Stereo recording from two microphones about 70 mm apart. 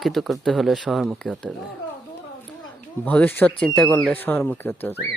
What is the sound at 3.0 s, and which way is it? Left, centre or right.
Speech, left.